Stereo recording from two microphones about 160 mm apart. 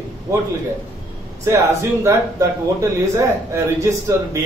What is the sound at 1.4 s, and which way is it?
Speech, 20° right (ahead or behind).